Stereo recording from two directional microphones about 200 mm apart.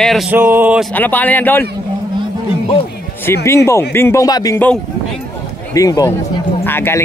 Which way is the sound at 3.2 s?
15° left (ahead or behind).